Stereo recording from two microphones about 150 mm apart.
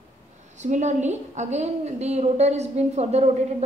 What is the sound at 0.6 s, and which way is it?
A woman's voice, 50° right (ahead or behind).